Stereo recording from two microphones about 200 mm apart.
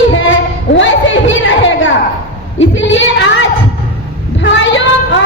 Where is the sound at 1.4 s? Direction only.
70° left (ahead or behind).